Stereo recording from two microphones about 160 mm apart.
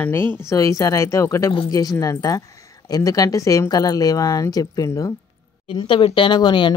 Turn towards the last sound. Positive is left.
turn(degrees=30)  # may be behind; listen again after turning